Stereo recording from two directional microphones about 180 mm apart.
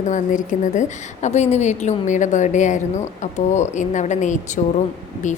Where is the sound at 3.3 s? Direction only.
40° left (ahead or behind).